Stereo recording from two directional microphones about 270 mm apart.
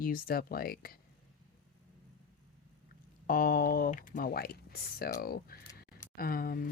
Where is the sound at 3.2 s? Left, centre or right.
Left.